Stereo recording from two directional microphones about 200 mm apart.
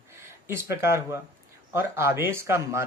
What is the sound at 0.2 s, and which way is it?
Speech, 15° right (ahead or behind).